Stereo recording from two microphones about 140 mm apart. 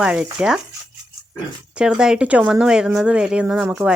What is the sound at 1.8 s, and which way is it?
Speech, 5° right (ahead or behind).